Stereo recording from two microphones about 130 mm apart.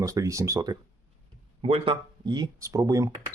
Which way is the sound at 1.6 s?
45° right (ahead or behind).